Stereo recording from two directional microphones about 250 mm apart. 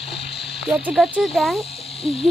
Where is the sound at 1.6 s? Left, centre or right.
Left.